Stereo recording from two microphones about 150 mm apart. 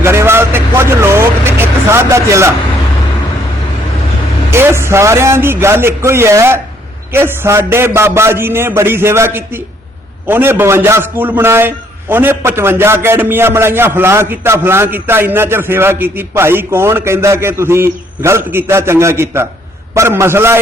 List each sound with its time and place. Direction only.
0.0 s vehicle: 15° right (ahead or behind)
4.5 s a man's voice: 15° right (ahead or behind)